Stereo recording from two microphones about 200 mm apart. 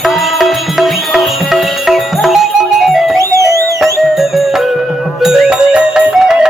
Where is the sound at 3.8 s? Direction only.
Centre (ahead or behind).